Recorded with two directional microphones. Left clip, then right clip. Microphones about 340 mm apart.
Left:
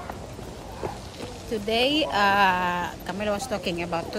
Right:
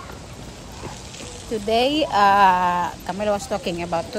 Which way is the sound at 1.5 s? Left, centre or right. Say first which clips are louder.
Right 4 dB; centre.